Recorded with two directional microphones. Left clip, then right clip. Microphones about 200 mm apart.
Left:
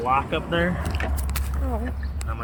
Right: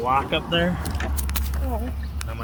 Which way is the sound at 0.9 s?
25° left (ahead or behind).